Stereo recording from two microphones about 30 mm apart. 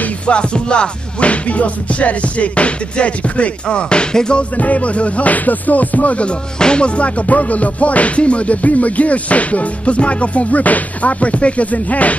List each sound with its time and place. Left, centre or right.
0.3 s music: left
1.2 s music: left
4.1 s music: left
4.6 s music: left
6.6 s music: left